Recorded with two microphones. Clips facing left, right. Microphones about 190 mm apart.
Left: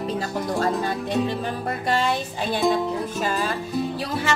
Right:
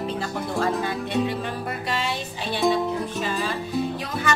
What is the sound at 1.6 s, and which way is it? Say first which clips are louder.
Music: left 8 dB; 45° left (ahead or behind).